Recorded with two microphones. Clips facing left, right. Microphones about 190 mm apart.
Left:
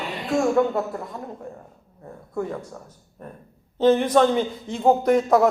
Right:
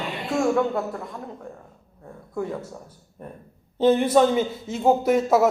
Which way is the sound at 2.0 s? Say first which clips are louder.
Left 1 dB; centre (ahead or behind).